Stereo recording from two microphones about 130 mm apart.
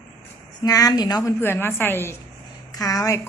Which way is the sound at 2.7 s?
25° left (ahead or behind).